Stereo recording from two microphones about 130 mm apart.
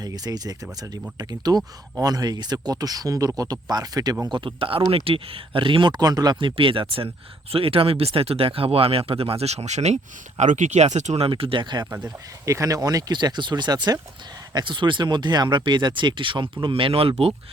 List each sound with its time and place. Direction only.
0.0 s speech: 30° right (ahead or behind); by 11.3 s 60° right (ahead or behind)
11.3 s speech: 40° right (ahead or behind)